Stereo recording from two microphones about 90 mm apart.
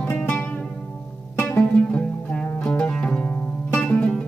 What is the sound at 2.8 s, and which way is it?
Music, 10° left (ahead or behind).